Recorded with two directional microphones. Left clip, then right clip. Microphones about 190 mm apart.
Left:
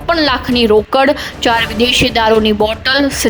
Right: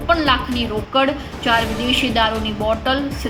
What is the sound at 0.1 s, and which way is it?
A woman's voice, 50° left (ahead or behind).